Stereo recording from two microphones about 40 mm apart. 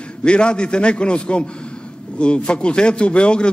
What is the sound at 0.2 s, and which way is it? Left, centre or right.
A man's voice, left.